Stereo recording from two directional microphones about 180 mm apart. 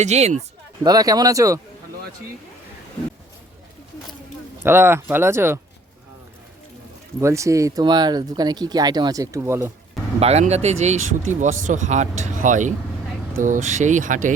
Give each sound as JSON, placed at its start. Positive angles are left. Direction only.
{"t": 0.0, "sound": "speech", "side_deg": -40}
{"t": 0.9, "sound": "speech", "side_deg": -20}
{"t": 4.6, "sound": "speech", "side_deg": -15}
{"t": 7.2, "sound": "speech", "side_deg": -15}
{"t": 10.2, "sound": "speech", "side_deg": -35}